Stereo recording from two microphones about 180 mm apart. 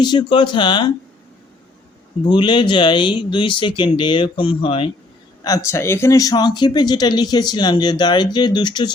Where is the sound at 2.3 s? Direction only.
25° left (ahead or behind).